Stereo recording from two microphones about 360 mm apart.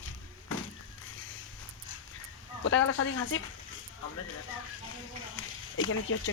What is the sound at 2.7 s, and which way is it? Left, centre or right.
Speech, left.